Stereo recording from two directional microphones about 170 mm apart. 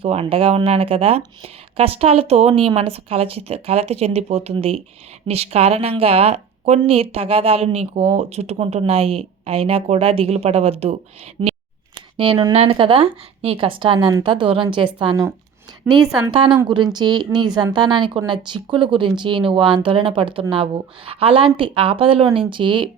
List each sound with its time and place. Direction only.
0.0 s speech: 35° right (ahead or behind)
11.4 s scissors: 30° right (ahead or behind)
12.1 s speech: 30° right (ahead or behind)
15.9 s a woman's voice: centre (ahead or behind)
16.6 s speech: 25° right (ahead or behind)